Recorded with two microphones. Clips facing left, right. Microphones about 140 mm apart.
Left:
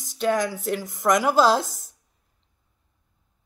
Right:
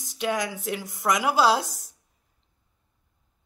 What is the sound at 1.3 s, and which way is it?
Speech, 10° right (ahead or behind).